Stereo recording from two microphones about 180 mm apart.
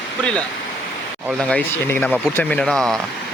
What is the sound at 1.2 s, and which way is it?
Speech, centre (ahead or behind).